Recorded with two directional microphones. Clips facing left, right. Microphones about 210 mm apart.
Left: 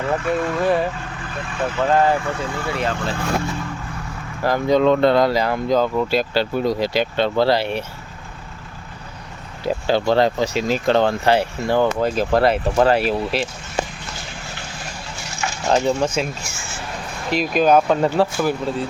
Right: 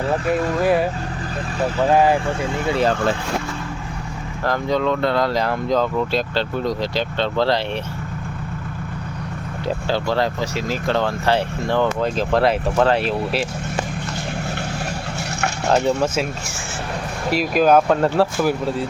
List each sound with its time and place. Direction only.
0.6 s speech: 5° right (ahead or behind)
2.6 s speech: 20° right (ahead or behind)
4.4 s speech: 10° left (ahead or behind)
4.8 s speech: 25° left (ahead or behind)
5.3 s speech: centre (ahead or behind)
9.6 s speech: 15° left (ahead or behind)
11.3 s speech: 10° left (ahead or behind)
15.4 s a sound: 65° right (ahead or behind)
15.7 s speech: 5° right (ahead or behind)
17.3 s speech: 5° right (ahead or behind)